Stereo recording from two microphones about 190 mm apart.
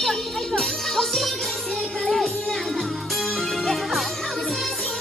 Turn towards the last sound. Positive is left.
turn(degrees=0)  # may be behind; listen again after turning